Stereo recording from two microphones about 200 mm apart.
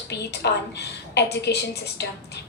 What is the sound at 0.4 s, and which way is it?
A woman's voice, 55° left (ahead or behind).